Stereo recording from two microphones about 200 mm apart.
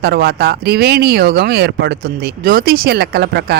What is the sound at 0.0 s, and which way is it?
Speech, 50° right (ahead or behind).